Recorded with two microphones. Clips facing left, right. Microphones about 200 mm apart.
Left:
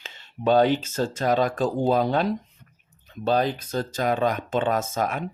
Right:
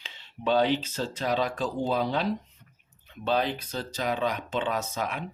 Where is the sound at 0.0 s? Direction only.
45° left (ahead or behind).